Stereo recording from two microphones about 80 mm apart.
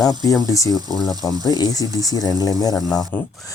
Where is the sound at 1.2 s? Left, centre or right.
Left.